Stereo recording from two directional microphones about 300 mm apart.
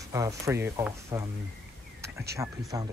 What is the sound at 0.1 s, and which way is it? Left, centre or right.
Speech, centre.